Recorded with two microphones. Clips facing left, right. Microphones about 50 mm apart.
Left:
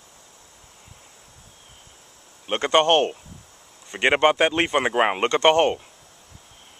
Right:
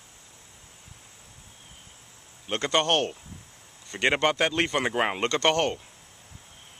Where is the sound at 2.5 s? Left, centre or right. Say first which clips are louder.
Left 6 dB; left.